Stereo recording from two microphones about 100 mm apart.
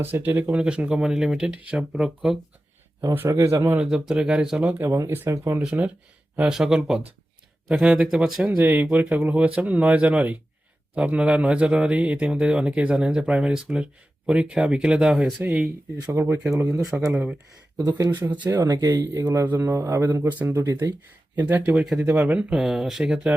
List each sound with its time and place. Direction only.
0.0 s speech: 20° right (ahead or behind); by 2.4 s centre (ahead or behind)
3.0 s speech: 30° right (ahead or behind)
3.8 s speech: 5° right (ahead or behind)
4.8 s speech: 25° right (ahead or behind)
5.6 s speech: 15° right (ahead or behind)
8.5 s speech: 20° right (ahead or behind)
15.4 s speech: 20° right (ahead or behind)
16.9 s speech: 10° right (ahead or behind)
17.7 s speech: 30° right (ahead or behind)
18.1 s speech: 20° right (ahead or behind)
18.4 s speech: 40° right (ahead or behind)
21.3 s speech: 15° right (ahead or behind)